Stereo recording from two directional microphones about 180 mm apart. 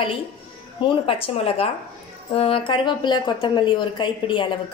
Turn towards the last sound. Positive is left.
turn(degrees=25)  # may be behind; listen again after turning